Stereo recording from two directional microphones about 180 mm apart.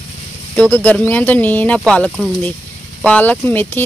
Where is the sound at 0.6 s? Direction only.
10° left (ahead or behind).